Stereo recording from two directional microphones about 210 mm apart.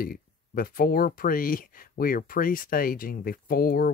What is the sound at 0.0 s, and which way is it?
Speech, 45° left (ahead or behind).